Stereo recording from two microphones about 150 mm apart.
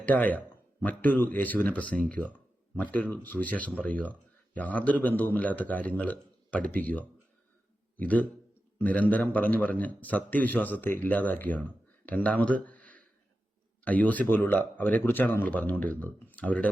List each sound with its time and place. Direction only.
0.0 s a man's voice: 10° left (ahead or behind)